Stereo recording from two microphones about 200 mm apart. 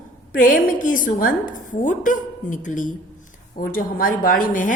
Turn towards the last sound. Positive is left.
turn(degrees=40)  # may be behind; listen again after turning